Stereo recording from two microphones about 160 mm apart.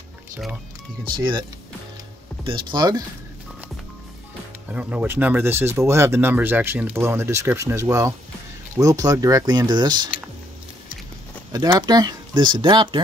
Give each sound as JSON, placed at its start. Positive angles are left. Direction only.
{"t": 1.1, "sound": "speech", "side_deg": -30}
{"t": 2.4, "sound": "speech", "side_deg": -30}
{"t": 4.7, "sound": "speech", "side_deg": -10}
{"t": 11.5, "sound": "speech", "side_deg": -25}